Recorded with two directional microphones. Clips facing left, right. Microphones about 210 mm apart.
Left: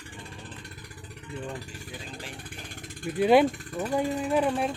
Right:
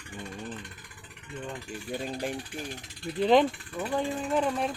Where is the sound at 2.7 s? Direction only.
50° left (ahead or behind).